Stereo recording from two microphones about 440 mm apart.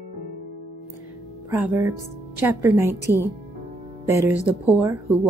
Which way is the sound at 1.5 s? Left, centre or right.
Centre.